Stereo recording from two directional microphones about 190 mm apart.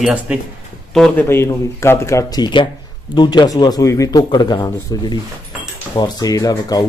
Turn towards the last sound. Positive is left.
turn(degrees=20)  # may be behind; listen again after turning